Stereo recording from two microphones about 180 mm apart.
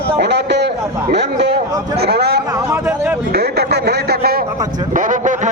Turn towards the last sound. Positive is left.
turn(degrees=-45)  # may be behind; listen again after turning